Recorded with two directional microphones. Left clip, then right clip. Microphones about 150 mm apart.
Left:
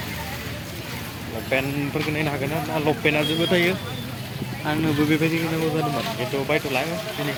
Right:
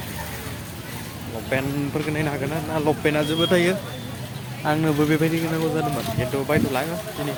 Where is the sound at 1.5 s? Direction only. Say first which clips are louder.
Left 1 dB; 10° right (ahead or behind).